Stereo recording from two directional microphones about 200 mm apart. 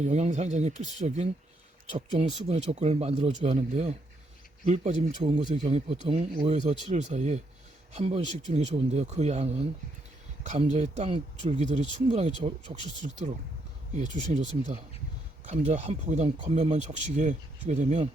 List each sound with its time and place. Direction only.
0.0 s speech: 35° right (ahead or behind)
13.9 s speech: 35° right (ahead or behind)